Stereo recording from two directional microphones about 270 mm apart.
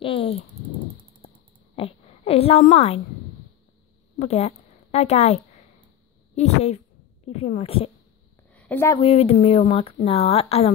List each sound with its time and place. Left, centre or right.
0.0 s speech: centre
1.8 s a woman's voice: left
4.2 s a woman's voice: left
8.5 s a woman's voice: centre
9.0 s speech: left